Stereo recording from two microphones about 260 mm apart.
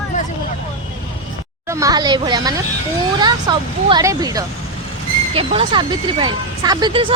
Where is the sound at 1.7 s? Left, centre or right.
Centre.